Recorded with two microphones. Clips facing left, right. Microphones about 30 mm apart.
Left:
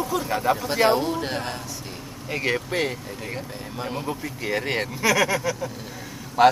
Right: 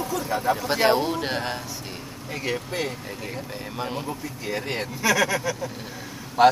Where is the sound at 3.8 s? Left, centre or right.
Centre.